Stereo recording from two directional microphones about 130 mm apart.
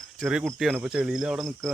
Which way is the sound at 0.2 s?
5° right (ahead or behind).